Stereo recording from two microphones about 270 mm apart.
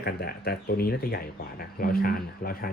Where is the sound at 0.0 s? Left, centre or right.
Left.